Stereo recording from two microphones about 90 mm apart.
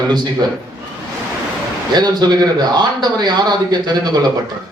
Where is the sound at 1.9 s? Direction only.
50° right (ahead or behind).